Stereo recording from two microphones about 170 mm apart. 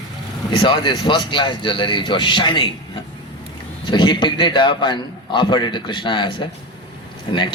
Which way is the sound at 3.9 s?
25° left (ahead or behind).